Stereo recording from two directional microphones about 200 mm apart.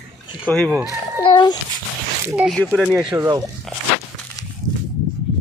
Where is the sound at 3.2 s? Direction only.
15° right (ahead or behind).